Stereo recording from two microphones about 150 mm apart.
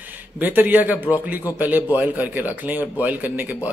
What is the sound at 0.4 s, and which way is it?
Speech, 10° right (ahead or behind).